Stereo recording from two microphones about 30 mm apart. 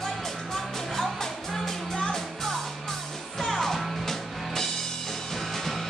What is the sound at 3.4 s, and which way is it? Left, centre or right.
Music, centre.